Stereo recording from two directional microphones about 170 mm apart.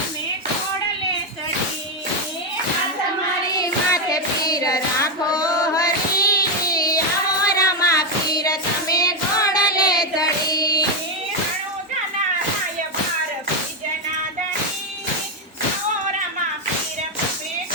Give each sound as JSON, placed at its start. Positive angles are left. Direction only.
{"t": 3.6, "sound": "child singing", "side_deg": 20}
{"t": 7.6, "sound": "music", "side_deg": 20}